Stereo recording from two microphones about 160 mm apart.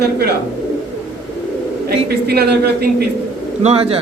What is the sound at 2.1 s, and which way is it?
Speech, 80° right.